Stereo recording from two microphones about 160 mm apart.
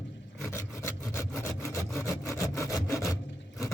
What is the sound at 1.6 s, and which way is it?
Sawing, 15° left (ahead or behind).